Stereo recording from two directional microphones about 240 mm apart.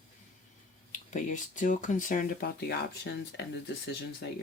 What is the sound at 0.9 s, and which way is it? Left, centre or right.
Speech, left.